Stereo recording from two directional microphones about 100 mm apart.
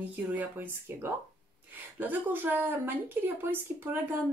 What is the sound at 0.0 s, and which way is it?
Speech, 15° right (ahead or behind).